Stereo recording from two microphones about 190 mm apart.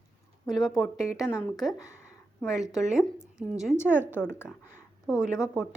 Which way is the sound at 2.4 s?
Centre (ahead or behind).